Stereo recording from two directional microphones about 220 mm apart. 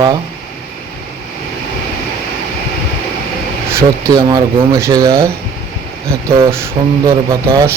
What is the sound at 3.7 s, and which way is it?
A man's voice, 15° right (ahead or behind).